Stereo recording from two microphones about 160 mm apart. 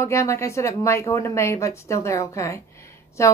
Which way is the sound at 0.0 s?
15° left (ahead or behind).